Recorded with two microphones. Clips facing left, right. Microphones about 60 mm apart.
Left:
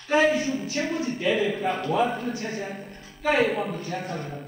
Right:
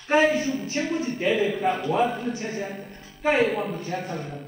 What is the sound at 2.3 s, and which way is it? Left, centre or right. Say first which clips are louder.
Speech: right 1 dB; centre.